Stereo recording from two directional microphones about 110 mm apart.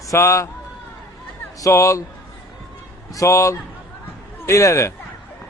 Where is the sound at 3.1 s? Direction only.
25° left (ahead or behind).